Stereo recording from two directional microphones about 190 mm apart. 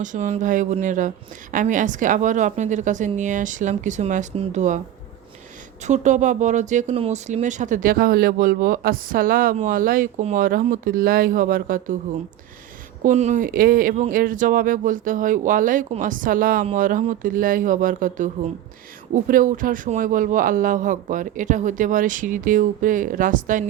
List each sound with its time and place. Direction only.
0.0 s speech: 40° right (ahead or behind)
5.8 s speech: 40° right (ahead or behind)
13.0 s speech: 40° right (ahead or behind)